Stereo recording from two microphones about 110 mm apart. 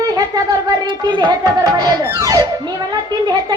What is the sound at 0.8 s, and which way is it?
Speech, 45° right (ahead or behind).